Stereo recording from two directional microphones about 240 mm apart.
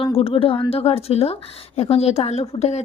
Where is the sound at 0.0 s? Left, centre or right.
Left.